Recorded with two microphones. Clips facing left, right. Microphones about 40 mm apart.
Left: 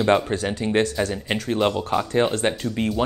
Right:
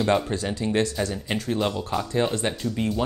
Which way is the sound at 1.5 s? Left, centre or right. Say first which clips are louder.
Left 5 dB; left.